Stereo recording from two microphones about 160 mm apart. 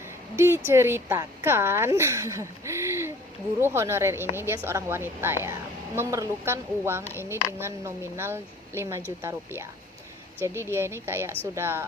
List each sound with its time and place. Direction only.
0.3 s a woman's voice: 15° right (ahead or behind)
10.7 s a woman's voice: 15° right (ahead or behind)